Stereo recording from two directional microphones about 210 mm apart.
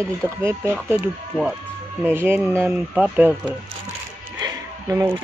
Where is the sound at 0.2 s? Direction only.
10° right (ahead or behind).